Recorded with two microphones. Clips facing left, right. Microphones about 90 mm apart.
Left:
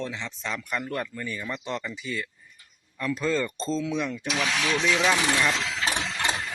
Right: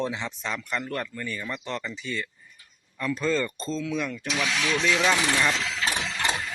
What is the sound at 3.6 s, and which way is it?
Speech, 30° left (ahead or behind).